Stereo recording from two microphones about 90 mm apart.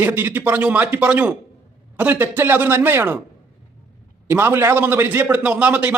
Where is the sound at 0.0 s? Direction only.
20° right (ahead or behind).